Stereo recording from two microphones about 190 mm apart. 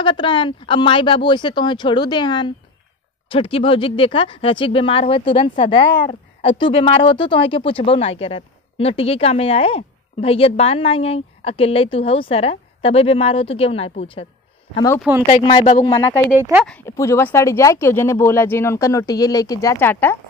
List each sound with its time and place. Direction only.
0.0 s a woman's voice: 25° left (ahead or behind)
15.0 s speech: 10° right (ahead or behind)
15.2 s speech: 25° left (ahead or behind)
16.3 s speech: 10° right (ahead or behind)
16.6 s speech: 10° left (ahead or behind)